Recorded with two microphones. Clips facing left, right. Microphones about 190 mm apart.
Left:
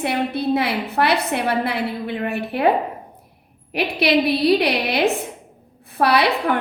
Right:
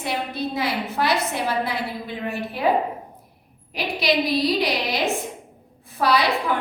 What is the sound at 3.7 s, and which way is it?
A woman's voice, 65° left (ahead or behind).